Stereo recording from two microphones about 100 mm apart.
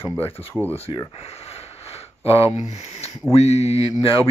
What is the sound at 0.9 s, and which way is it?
Speech, 60° left (ahead or behind).